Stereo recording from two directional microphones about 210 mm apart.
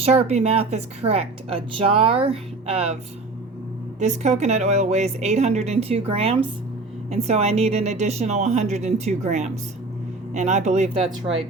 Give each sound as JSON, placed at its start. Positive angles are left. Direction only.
{"t": 0.0, "sound": "speech", "side_deg": -30}
{"t": 4.0, "sound": "a woman's voice", "side_deg": -35}